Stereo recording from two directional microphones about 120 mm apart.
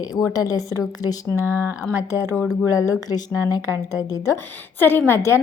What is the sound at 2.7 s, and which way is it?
A woman's voice, 25° left (ahead or behind).